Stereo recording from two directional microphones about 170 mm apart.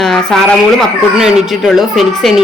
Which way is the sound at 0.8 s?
5° right (ahead or behind).